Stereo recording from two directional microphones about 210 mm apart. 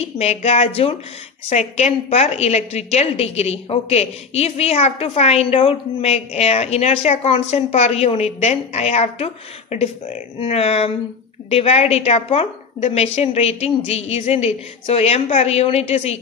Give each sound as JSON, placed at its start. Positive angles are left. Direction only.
{"t": 0.2, "sound": "a woman's voice", "side_deg": 30}